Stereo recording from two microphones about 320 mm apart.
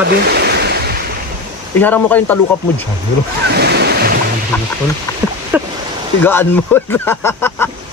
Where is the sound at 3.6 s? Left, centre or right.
Right.